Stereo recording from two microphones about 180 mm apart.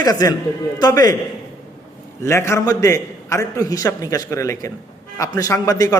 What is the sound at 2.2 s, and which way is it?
A man's voice, 15° left (ahead or behind).